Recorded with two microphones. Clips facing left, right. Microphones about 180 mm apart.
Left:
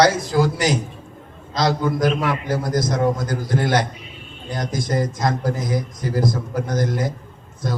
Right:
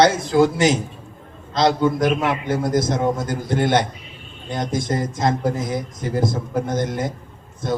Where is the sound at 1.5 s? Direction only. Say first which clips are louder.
Right 3 dB; 25° right (ahead or behind).